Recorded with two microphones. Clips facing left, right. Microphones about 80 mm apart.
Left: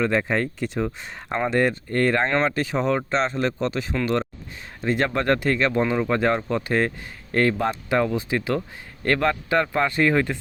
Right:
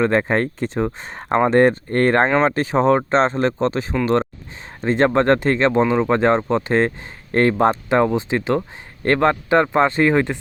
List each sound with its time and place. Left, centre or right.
0.0 s speech: right